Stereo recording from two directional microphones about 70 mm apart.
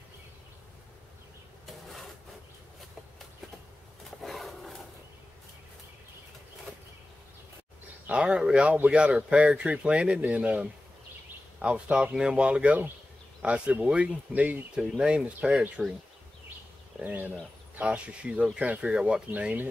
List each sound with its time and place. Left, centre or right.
1.7 s a sound: centre
4.2 s wild animals: centre
8.1 s speech: centre
17.0 s speech: right